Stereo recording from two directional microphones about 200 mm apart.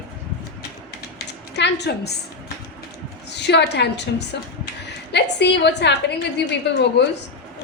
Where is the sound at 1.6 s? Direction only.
60° left (ahead or behind).